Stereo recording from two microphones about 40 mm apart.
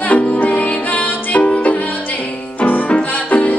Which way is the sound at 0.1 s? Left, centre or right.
Left.